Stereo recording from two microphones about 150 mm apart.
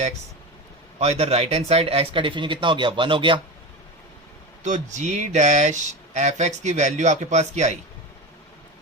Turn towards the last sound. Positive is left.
turn(degrees=-50)  # may be behind; listen again after turning